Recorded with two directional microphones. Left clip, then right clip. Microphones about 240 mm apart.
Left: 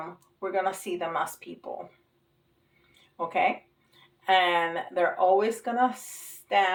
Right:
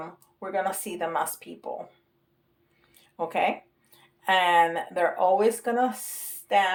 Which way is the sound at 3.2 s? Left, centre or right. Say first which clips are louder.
Even; right.